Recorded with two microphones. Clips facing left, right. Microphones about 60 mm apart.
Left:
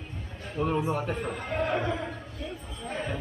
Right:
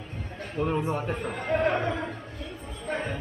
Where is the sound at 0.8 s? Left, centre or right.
Centre.